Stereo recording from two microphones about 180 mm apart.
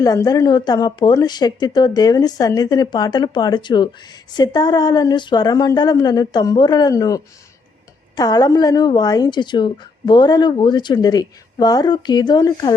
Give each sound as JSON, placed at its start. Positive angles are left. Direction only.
{"t": 0.0, "sound": "a woman's voice", "side_deg": 20}